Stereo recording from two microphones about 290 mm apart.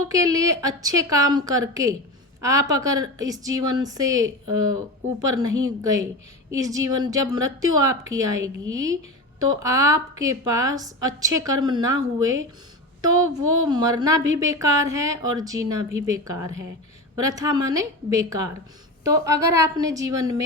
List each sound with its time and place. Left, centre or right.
0.1 s a woman's voice: centre
13.2 s a woman's voice: right
13.7 s a woman's voice: centre